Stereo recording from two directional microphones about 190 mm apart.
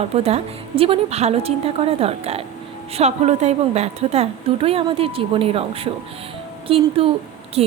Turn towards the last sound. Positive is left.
turn(degrees=-30)  # may be behind; listen again after turning